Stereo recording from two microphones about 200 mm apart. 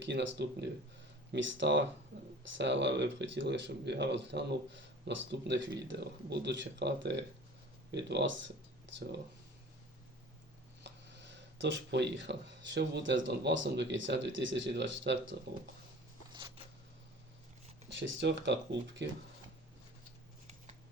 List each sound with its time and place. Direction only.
0.0 s speech: 60° right (ahead or behind)
10.8 s speech: 60° right (ahead or behind)
18.0 s speech: 65° right (ahead or behind)